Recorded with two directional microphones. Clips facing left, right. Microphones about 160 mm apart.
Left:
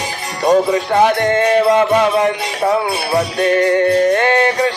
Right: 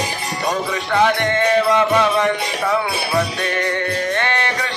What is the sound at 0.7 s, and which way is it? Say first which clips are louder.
Music: left 4 dB; 35° left (ahead or behind).